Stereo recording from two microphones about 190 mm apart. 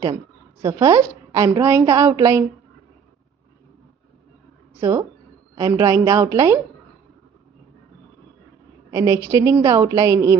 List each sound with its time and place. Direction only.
0.0 s a woman's voice: 15° right (ahead or behind)
4.7 s a woman's voice: 15° right (ahead or behind)
8.9 s a woman's voice: 15° right (ahead or behind)